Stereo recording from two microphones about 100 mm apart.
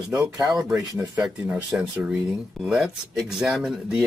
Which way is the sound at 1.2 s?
5° right (ahead or behind).